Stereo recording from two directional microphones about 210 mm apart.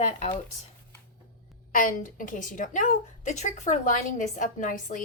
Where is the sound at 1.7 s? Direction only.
40° left (ahead or behind).